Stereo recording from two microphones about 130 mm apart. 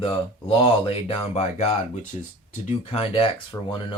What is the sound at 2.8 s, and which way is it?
Speech, 45° left (ahead or behind).